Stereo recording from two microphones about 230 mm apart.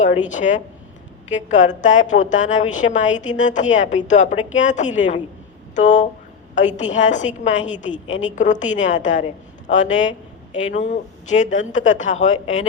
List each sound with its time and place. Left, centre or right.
0.0 s a woman's voice: left